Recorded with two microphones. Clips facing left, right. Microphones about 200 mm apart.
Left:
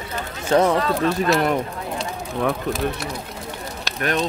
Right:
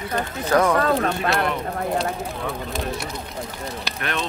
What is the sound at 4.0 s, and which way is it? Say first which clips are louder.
Speech: left 6 dB; 40° left (ahead or behind).